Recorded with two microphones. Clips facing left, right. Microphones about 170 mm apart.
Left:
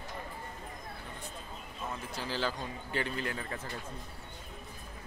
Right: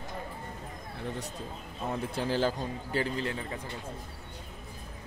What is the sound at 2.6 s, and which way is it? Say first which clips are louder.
A man's voice: right 4 dB; 35° right (ahead or behind).